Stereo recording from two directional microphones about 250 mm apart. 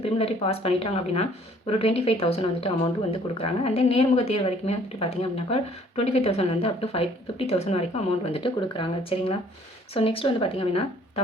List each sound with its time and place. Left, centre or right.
0.0 s speech: left